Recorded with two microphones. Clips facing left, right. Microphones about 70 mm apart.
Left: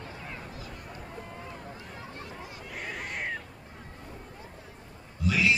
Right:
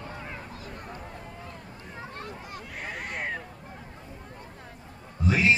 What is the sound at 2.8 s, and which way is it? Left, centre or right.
Cat, centre.